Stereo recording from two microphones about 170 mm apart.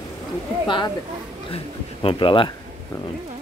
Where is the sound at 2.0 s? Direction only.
30° left (ahead or behind).